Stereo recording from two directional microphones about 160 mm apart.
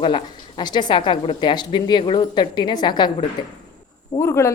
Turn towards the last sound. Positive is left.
turn(degrees=15)  # may be behind; listen again after turning